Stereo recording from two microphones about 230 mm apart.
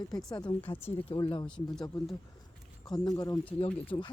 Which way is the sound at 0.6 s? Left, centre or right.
Centre.